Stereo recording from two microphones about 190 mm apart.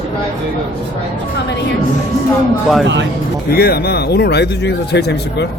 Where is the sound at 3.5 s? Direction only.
55° left (ahead or behind).